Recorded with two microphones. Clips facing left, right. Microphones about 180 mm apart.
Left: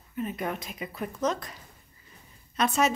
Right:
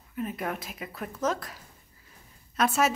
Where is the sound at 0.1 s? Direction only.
Centre (ahead or behind).